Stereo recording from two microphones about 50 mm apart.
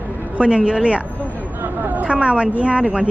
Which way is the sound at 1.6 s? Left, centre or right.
Right.